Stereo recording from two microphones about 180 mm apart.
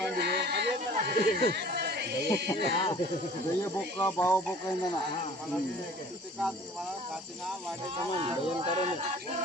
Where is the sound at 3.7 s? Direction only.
15° left (ahead or behind).